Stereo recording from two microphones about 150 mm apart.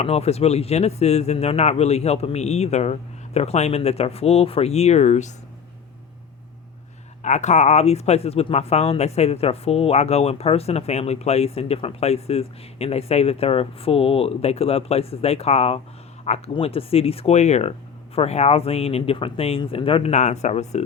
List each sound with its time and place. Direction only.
0.0 s speech: 45° left (ahead or behind)
7.2 s speech: 50° left (ahead or behind)